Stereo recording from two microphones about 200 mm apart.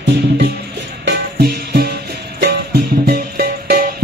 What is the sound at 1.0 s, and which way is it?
Music, 50° right (ahead or behind).